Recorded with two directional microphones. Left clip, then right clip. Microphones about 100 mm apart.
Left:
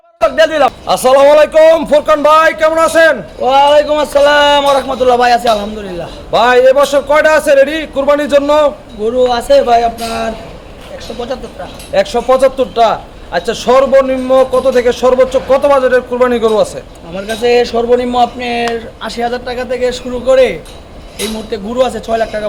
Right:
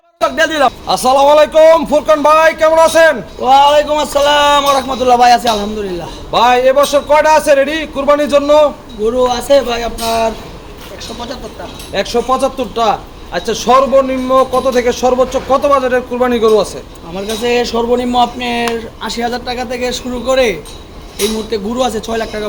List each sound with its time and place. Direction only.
0.2 s speech: 5° right (ahead or behind)
0.9 s a man's voice: 55° left (ahead or behind)
3.4 s speech: 10° left (ahead or behind)
6.3 s a man's voice: 40° left (ahead or behind)
9.3 s speech: 20° left (ahead or behind)
11.9 s a man's voice: 45° left (ahead or behind)
17.2 s speech: 10° left (ahead or behind); by 22.4 s 5° right (ahead or behind)